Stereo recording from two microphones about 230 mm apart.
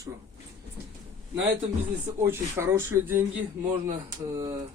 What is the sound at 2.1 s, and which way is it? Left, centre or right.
Speech, centre.